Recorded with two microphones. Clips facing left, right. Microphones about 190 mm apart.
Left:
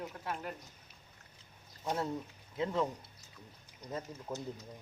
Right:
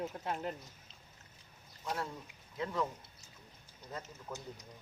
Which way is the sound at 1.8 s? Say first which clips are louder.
Left 4 dB; 25° left (ahead or behind).